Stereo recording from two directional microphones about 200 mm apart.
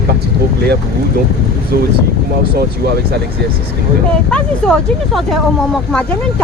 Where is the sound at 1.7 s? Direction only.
50° right (ahead or behind).